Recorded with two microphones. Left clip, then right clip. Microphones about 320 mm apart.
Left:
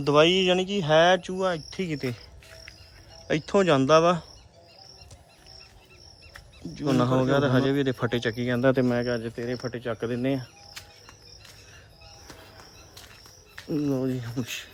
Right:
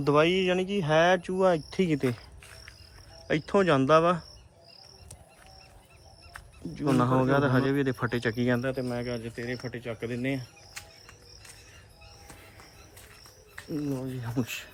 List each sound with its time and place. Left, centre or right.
0.0 s speech: centre
3.2 s speech: centre
6.3 s speech: centre
8.6 s speech: left
9.0 s speech: centre
14.2 s speech: centre